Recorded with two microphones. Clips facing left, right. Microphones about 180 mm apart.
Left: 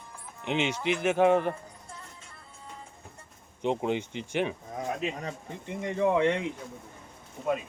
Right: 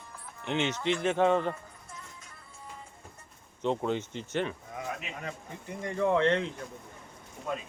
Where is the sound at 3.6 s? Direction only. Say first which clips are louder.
Left 1 dB; 15° left (ahead or behind).